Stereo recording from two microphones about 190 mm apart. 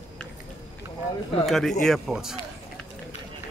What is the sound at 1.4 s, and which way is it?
Speech, centre (ahead or behind).